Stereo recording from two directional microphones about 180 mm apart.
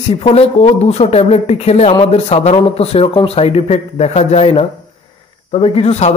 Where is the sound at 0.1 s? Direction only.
35° left (ahead or behind).